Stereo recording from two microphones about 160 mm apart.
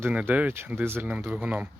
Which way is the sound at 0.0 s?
10° right (ahead or behind).